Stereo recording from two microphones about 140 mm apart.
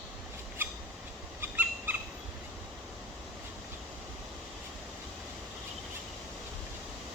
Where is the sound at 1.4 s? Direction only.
15° right (ahead or behind).